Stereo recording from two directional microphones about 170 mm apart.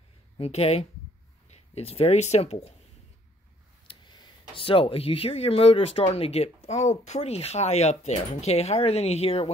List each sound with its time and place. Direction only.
0.4 s speech: 35° left (ahead or behind)
3.8 s speech: 30° left (ahead or behind)